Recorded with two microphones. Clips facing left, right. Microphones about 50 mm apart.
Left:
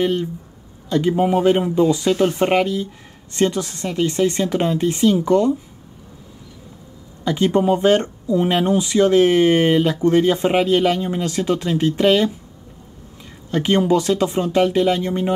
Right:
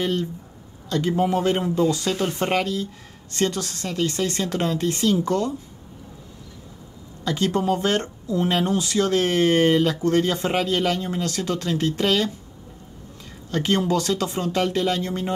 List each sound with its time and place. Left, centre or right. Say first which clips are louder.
0.0 s speech: left 5 dB; left
7.2 s speech: left 5 dB; centre
13.5 s speech: left 5 dB; centre